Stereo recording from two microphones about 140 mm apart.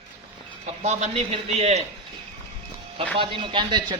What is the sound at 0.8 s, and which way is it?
A man's voice, 55° right (ahead or behind).